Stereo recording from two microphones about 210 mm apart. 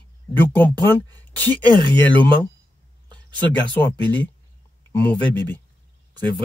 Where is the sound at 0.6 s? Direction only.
10° left (ahead or behind).